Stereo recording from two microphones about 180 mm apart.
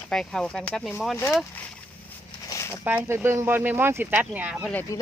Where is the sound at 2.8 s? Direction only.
10° right (ahead or behind).